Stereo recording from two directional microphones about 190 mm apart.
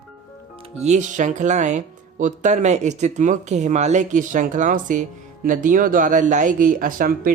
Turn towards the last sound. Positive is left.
turn(degrees=-45)  # may be behind; listen again after turning